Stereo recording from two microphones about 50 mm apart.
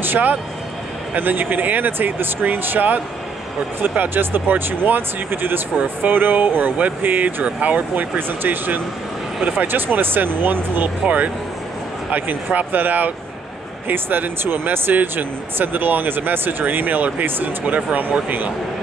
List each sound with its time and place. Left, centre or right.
0.0 s speech: right
7.4 s speech: right
8.2 s speech: right